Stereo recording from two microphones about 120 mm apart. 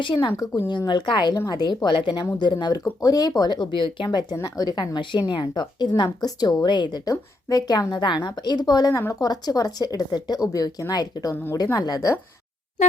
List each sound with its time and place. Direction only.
0.0 s a woman's voice: 40° left (ahead or behind)